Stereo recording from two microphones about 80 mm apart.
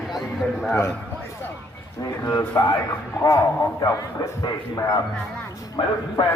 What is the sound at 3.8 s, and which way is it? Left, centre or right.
Speech, left.